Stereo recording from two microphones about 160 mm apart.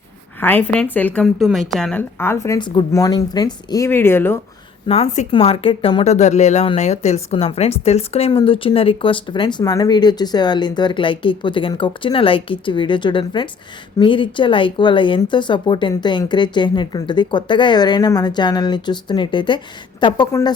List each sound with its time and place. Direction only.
0.3 s speech: 10° left (ahead or behind)
1.2 s a woman's voice: centre (ahead or behind); by 2.6 s 15° left (ahead or behind)
2.6 s speech: 30° left (ahead or behind); by 4.4 s 15° left (ahead or behind)
4.9 s speech: 45° left (ahead or behind)
5.3 s speech: 35° left (ahead or behind)